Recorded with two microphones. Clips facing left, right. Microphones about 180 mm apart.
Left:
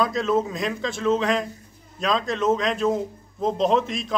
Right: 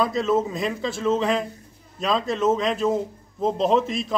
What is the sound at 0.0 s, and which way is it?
A man's voice, 5° right (ahead or behind).